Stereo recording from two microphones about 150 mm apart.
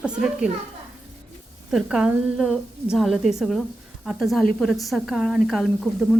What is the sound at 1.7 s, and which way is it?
A woman's voice, 5° right (ahead or behind).